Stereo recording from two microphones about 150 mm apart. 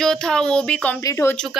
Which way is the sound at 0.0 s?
5° left (ahead or behind).